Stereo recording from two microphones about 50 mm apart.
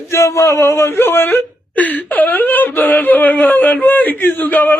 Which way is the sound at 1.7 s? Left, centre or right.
Left.